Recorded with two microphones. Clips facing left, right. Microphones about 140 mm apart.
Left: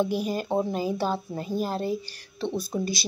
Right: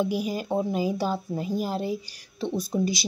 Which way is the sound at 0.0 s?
10° right (ahead or behind).